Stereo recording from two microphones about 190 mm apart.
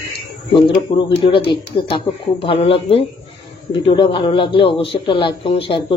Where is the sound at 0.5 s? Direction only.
25° left (ahead or behind).